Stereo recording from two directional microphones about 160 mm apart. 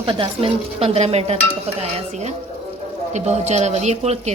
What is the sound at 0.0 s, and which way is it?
Dishes, 35° right (ahead or behind).